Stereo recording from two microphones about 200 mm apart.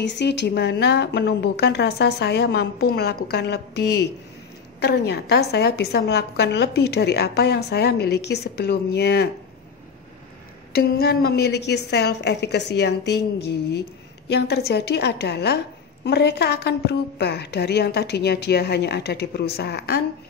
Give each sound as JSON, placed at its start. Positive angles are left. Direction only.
{"t": 0.0, "sound": "a woman's voice", "side_deg": 60}
{"t": 10.7, "sound": "a woman's voice", "side_deg": 50}